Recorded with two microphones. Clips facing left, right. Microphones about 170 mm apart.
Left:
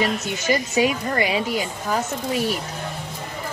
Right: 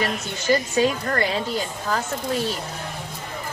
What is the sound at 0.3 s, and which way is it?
A woman's voice, 10° left (ahead or behind).